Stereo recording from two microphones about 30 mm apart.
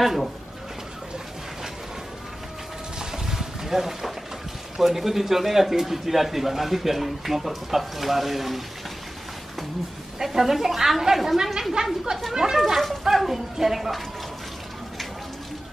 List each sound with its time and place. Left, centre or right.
0.0 s speech: centre
3.0 s a sound: centre
4.7 s a man's voice: centre
10.1 s a man's voice: centre
12.5 s speech: centre